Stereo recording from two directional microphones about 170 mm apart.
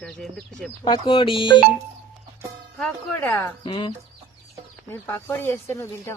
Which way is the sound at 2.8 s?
10° left (ahead or behind).